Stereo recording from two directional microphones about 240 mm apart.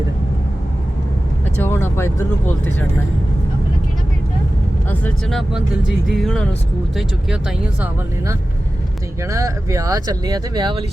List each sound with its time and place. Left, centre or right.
1.6 s speech: centre
4.9 s speech: centre
7.8 s speech: centre